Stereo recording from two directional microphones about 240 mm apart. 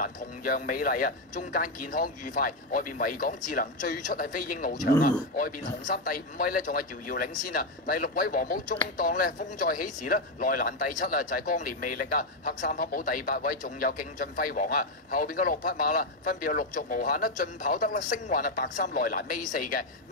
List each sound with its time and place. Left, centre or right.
0.0 s speech: left